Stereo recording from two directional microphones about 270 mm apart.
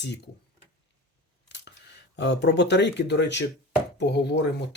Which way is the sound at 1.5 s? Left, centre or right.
Left.